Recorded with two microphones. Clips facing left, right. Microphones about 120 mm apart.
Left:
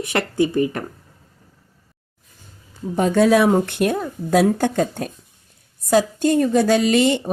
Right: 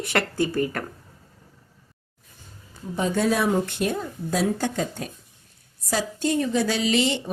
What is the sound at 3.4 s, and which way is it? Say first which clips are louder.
A woman's voice: left 6 dB; 55° left (ahead or behind).